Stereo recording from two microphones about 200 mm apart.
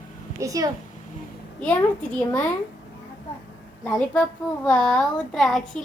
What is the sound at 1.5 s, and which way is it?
Speech, 5° left (ahead or behind).